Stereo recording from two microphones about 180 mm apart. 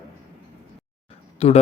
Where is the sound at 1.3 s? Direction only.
35° left (ahead or behind).